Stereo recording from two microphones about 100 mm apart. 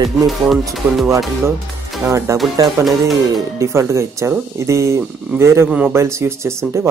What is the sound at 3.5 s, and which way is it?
Speech, 30° right (ahead or behind).